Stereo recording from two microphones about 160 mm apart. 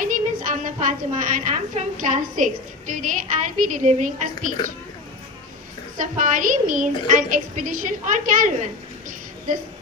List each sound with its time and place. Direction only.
0.0 s a woman's voice: 55° right (ahead or behind)
5.9 s a woman's voice: 55° right (ahead or behind)